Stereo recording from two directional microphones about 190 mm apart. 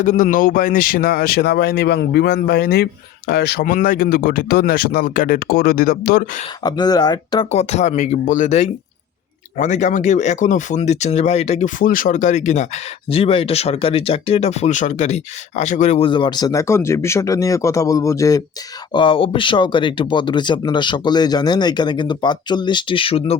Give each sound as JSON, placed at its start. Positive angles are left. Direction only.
{"t": 0.0, "sound": "speech", "side_deg": 45}
{"t": 6.6, "sound": "speech", "side_deg": 20}
{"t": 7.5, "sound": "speech", "side_deg": 35}